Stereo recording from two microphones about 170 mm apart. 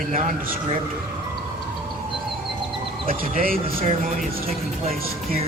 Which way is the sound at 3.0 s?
55° right (ahead or behind).